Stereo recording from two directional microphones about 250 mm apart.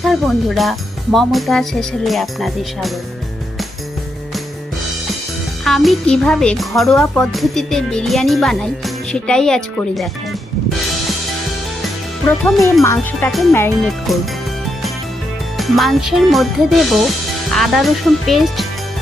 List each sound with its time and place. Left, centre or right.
0.0 s speech: centre
5.6 s speech: centre
12.5 s speech: centre
15.5 s speech: centre